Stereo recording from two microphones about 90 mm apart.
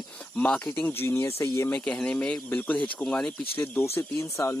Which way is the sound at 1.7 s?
10° left (ahead or behind).